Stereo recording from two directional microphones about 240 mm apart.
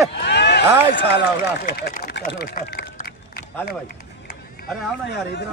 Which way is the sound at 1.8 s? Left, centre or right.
Left.